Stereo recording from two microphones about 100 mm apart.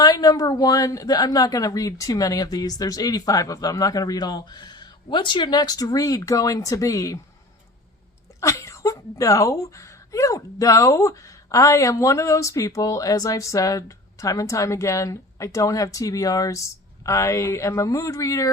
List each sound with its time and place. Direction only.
0.0 s speech: 40° left (ahead or behind)
8.4 s speech: 30° left (ahead or behind)